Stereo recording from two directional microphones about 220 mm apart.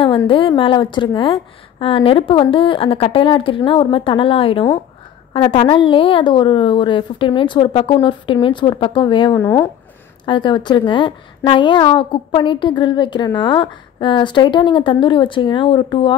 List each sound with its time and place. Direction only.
0.2 s a woman's voice: 25° left (ahead or behind)